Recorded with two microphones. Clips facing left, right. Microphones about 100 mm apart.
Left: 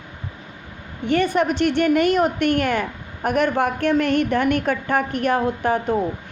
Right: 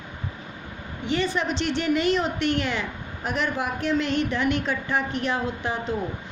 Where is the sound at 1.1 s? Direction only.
55° left (ahead or behind).